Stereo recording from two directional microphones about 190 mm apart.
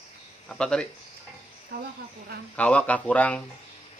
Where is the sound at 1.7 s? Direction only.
55° right (ahead or behind).